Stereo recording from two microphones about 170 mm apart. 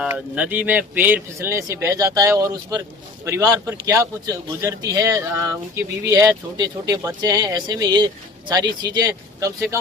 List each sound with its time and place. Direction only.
0.0 s speech: 10° right (ahead or behind)